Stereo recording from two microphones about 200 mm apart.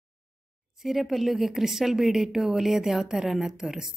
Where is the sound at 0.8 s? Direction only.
Centre (ahead or behind).